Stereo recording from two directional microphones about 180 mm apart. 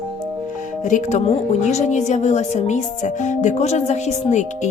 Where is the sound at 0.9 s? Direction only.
40° left (ahead or behind).